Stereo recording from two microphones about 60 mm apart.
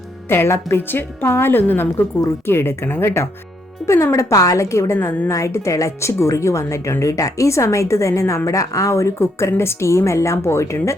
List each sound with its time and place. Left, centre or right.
0.3 s a woman's voice: left
3.8 s a woman's voice: left
7.0 s a woman's voice: left